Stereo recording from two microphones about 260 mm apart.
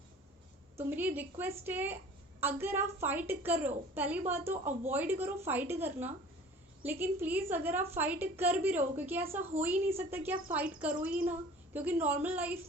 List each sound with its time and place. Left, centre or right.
0.8 s a woman's voice: centre